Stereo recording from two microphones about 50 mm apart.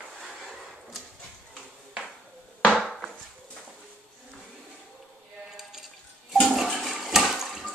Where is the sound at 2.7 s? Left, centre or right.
Centre.